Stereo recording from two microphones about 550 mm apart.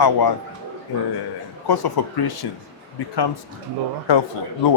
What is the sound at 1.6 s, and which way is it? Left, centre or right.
Speech, left.